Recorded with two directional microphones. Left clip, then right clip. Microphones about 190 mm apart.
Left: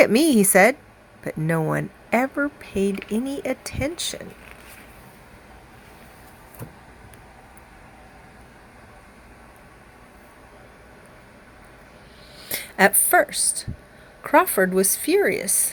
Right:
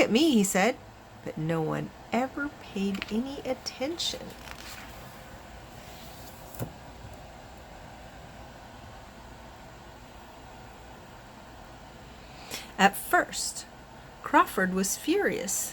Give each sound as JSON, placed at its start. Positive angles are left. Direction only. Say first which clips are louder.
{"t": 0.0, "sound": "speech", "louder": "left 7 dB", "side_deg": 40}
{"t": 12.5, "sound": "a woman's voice", "louder": "left 6 dB", "side_deg": 30}